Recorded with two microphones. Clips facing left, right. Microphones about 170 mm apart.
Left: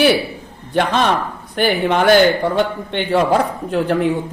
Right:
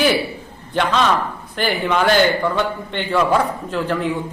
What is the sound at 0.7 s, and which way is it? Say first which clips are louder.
A man's voice: left 2 dB; 55° left (ahead or behind).